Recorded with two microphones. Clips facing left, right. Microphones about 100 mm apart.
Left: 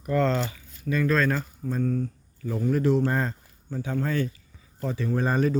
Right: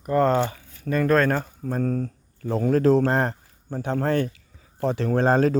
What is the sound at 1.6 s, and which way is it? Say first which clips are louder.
Speech: even; 65° right (ahead or behind).